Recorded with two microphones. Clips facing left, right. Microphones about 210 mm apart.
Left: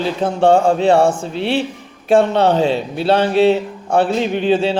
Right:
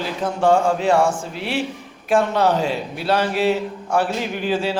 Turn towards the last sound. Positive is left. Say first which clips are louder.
# left 6 dB
turn(degrees=25)  # may be behind; listen again after turning